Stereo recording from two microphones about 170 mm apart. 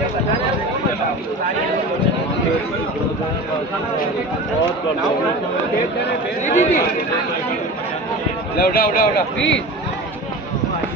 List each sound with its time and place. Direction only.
6.4 s speech: 45° left (ahead or behind)
8.5 s a man's voice: 60° left (ahead or behind)